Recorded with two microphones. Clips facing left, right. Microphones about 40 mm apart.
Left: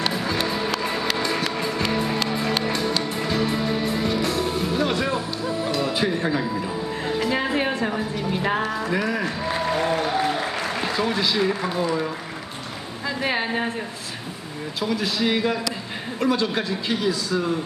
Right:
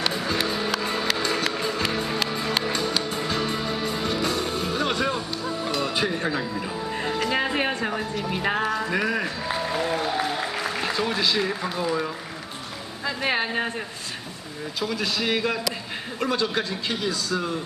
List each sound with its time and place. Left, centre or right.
0.0 s music: centre
3.0 s music: centre
7.3 s speech: centre
9.4 s applause: centre
10.5 s a man's voice: centre
14.9 s a man's voice: centre